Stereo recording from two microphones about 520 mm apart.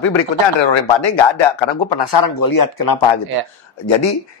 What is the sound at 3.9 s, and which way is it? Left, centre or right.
Speech, left.